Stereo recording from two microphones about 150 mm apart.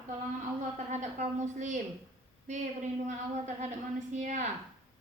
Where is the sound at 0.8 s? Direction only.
55° right (ahead or behind).